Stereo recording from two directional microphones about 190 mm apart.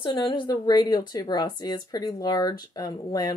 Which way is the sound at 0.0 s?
25° left (ahead or behind).